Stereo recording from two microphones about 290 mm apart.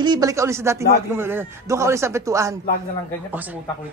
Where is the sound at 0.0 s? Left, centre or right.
Centre.